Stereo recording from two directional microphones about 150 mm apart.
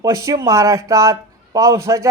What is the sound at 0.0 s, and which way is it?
A man's voice, 20° right (ahead or behind).